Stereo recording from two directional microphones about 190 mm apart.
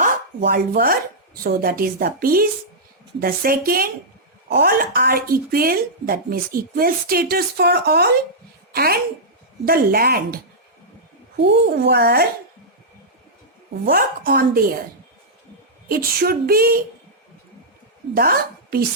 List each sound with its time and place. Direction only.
0.0 s chopping: 50° right (ahead or behind)
1.5 s a woman's voice: 50° right (ahead or behind)
13.8 s a woman's voice: 50° right (ahead or behind)
15.9 s a woman's voice: 55° right (ahead or behind)
18.1 s a woman's voice: 50° right (ahead or behind)